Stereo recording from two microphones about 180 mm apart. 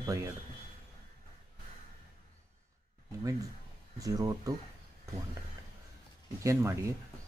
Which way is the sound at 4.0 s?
20° right (ahead or behind).